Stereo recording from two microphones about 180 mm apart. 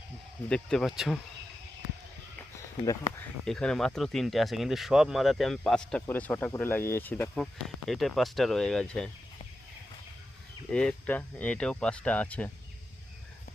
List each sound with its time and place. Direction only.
0.4 s speech: 5° left (ahead or behind)
2.8 s speech: 20° left (ahead or behind)
3.4 s speech: 5° left (ahead or behind)
10.7 s speech: 5° left (ahead or behind)